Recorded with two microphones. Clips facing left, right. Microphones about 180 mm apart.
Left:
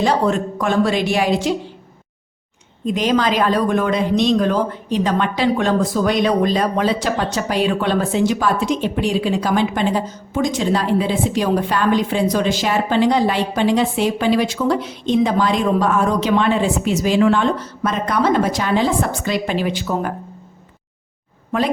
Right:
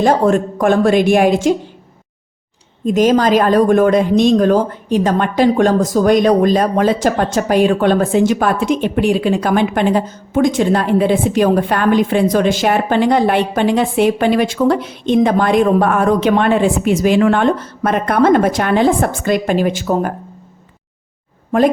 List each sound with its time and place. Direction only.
0.0 s speech: 50° right (ahead or behind)
2.8 s speech: 45° right (ahead or behind)